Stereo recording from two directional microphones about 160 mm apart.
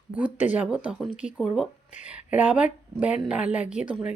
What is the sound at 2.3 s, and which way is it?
A woman's voice, 10° right (ahead or behind).